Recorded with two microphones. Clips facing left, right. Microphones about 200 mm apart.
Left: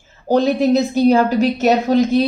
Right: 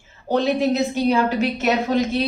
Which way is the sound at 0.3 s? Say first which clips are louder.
Left 5 dB; 40° left (ahead or behind).